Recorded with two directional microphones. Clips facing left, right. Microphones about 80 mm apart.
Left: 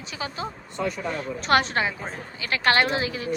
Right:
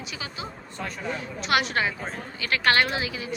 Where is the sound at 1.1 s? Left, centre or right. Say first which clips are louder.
Left 3 dB; left.